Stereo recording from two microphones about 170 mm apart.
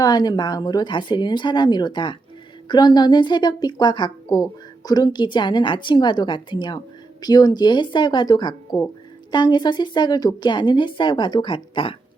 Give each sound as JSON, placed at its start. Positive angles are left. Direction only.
{"t": 0.0, "sound": "a woman's voice", "side_deg": 25}